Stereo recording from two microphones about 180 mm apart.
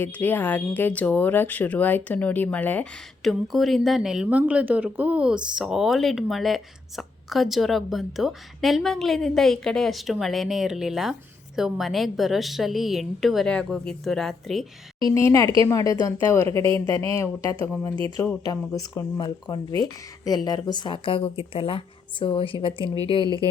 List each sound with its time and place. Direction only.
0.0 s speech: 10° left (ahead or behind)
15.0 s a woman's voice: 15° left (ahead or behind)